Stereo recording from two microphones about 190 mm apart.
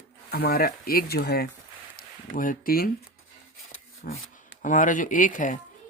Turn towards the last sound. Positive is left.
turn(degrees=45)  # may be behind; listen again after turning